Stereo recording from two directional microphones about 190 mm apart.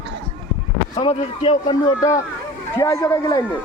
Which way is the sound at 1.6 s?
20° left (ahead or behind).